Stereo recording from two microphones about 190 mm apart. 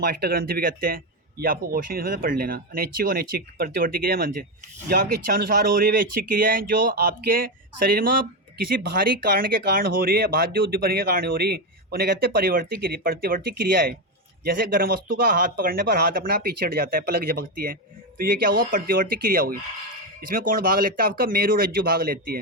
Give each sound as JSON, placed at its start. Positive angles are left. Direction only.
{"t": 0.0, "sound": "speech", "side_deg": -50}